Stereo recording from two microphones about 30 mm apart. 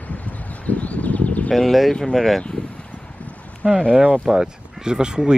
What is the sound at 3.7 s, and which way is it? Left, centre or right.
Speech, left.